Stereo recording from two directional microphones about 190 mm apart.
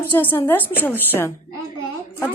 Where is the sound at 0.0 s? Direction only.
10° left (ahead or behind).